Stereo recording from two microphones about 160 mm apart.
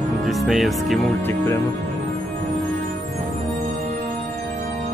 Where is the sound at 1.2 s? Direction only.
15° left (ahead or behind).